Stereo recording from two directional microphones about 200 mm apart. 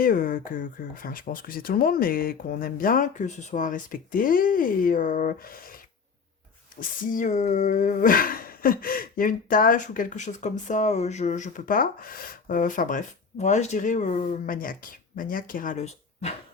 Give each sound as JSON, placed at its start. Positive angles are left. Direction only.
{"t": 0.0, "sound": "speech", "side_deg": 45}
{"t": 6.7, "sound": "speech", "side_deg": 45}